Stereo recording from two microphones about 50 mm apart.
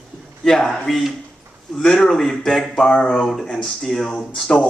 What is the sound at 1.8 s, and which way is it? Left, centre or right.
Speech, centre.